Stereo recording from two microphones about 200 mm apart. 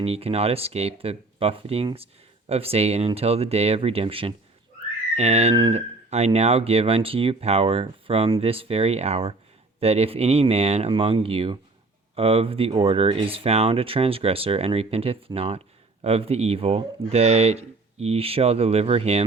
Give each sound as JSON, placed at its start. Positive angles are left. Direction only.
{"t": 0.0, "sound": "speech", "side_deg": -30}